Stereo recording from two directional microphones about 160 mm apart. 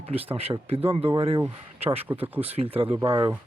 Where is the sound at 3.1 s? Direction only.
35° right (ahead or behind).